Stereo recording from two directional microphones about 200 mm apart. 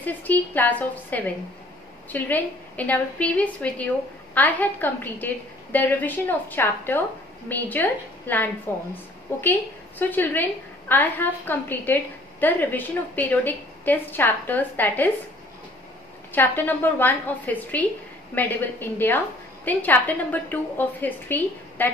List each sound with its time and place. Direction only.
0.0 s a woman's voice: 10° left (ahead or behind)
16.3 s a woman's voice: 10° left (ahead or behind)